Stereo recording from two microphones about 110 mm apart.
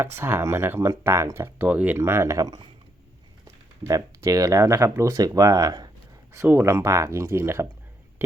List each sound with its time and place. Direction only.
0.0 s speech: 20° right (ahead or behind); by 5.9 s 35° right (ahead or behind)
6.3 s speech: 25° right (ahead or behind)